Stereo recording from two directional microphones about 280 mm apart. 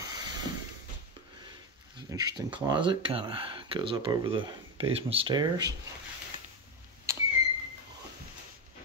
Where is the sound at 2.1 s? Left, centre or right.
Centre.